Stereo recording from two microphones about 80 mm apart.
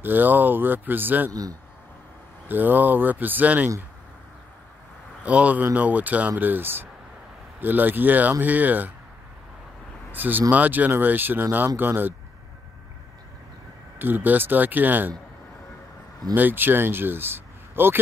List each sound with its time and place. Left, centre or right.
0.0 s speech: right
1.3 s a man's voice: right
2.4 s speech: right
5.2 s speech: centre
10.1 s speech: right
13.9 s speech: right
16.3 s speech: right